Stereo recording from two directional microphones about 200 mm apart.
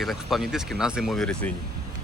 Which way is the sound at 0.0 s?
Centre (ahead or behind).